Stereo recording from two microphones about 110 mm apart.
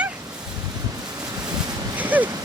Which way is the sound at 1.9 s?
15° right (ahead or behind).